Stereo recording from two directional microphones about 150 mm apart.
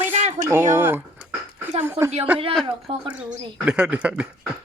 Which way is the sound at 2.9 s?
40° right (ahead or behind).